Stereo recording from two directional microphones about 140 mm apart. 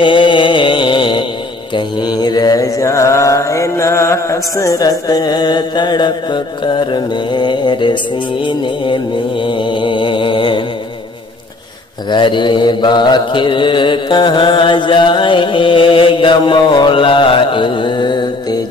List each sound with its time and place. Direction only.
0.0 s music: 35° left (ahead or behind)
1.8 s mantra: 30° left (ahead or behind)
12.1 s mantra: 35° left (ahead or behind)